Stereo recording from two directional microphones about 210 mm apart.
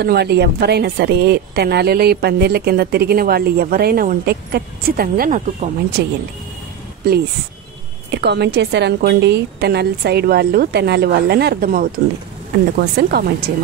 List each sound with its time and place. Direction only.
0.0 s speech: 50° right (ahead or behind)
8.1 s speech: 55° right (ahead or behind)